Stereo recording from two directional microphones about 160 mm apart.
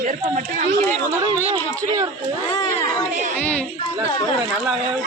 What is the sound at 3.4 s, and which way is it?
Speech, 10° left (ahead or behind).